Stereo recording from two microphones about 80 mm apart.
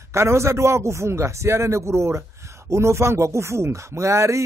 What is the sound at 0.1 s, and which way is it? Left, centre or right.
Speech, right.